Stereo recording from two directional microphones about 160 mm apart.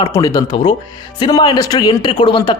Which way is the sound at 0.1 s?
20° left (ahead or behind).